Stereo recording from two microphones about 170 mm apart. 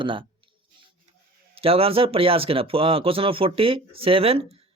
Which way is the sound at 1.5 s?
35° right (ahead or behind).